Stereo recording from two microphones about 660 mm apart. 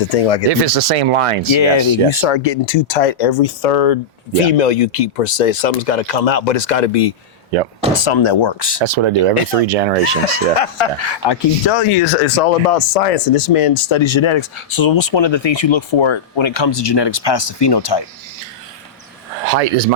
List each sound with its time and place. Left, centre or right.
0.1 s speech: left
0.6 s speech: right
1.5 s speech: left
2.0 s speech: left
8.0 s speech: left
8.8 s speech: right
9.6 s speech: right
10.2 s speech: left
12.0 s speech: left
19.5 s speech: right